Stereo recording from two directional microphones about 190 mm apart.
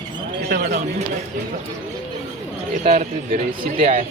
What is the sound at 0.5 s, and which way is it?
Speech, 50° right (ahead or behind).